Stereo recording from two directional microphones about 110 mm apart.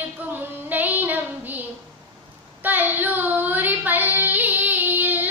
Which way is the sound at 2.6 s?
15° right (ahead or behind).